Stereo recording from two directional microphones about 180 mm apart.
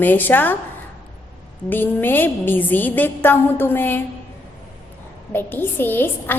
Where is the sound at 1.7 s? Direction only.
10° left (ahead or behind).